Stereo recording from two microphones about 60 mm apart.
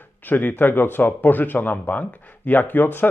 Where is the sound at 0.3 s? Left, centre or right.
Left.